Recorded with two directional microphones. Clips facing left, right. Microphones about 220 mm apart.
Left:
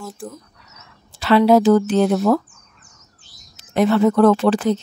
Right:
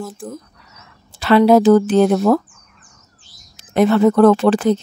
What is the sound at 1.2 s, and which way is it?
Speech, 50° right (ahead or behind).